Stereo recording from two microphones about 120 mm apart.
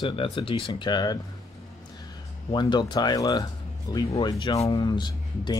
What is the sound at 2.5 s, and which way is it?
Speech, 40° left (ahead or behind).